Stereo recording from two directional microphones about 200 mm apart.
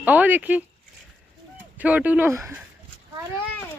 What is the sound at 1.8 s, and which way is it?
Speech, 5° right (ahead or behind).